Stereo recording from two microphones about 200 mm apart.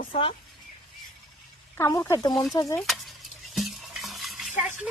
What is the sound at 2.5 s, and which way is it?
Speech, 15° left (ahead or behind).